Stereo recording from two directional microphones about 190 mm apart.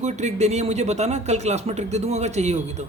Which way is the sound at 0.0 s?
35° right (ahead or behind).